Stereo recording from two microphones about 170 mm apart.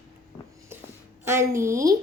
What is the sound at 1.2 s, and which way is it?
Speech, 15° right (ahead or behind).